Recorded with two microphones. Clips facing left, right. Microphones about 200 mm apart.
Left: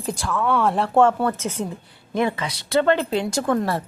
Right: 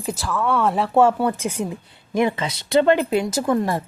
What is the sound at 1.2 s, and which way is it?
A woman's voice, 15° right (ahead or behind).